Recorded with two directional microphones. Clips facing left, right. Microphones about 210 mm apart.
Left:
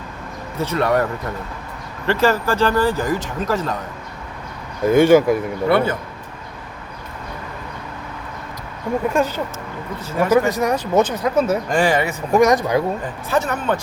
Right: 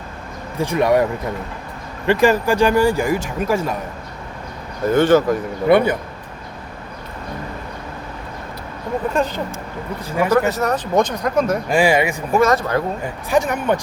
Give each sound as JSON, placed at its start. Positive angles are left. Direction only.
{"t": 0.6, "sound": "speech", "side_deg": -15}
{"t": 2.0, "sound": "speech", "side_deg": -15}
{"t": 4.9, "sound": "speech", "side_deg": 10}
{"t": 5.6, "sound": "speech", "side_deg": -15}
{"t": 9.1, "sound": "speech", "side_deg": 10}
{"t": 10.1, "sound": "speech", "side_deg": -10}
{"t": 10.3, "sound": "speech", "side_deg": 10}
{"t": 11.7, "sound": "speech", "side_deg": -10}
{"t": 12.3, "sound": "speech", "side_deg": 15}
{"t": 13.3, "sound": "speech", "side_deg": -15}